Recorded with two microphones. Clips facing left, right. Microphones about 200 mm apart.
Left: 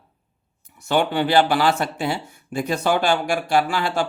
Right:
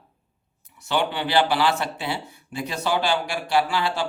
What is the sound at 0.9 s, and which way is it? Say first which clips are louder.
Speech: left 5 dB; 45° left (ahead or behind).